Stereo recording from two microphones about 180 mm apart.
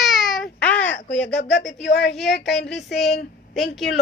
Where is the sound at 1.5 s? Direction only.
80° left.